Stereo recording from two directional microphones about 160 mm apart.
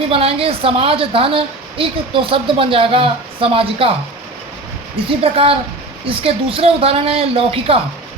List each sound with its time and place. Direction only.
0.1 s a woman's voice: 35° right (ahead or behind)
5.2 s a woman's voice: 35° right (ahead or behind)